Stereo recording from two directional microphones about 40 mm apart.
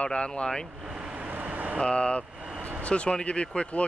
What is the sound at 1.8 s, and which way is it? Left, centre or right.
Speech, left.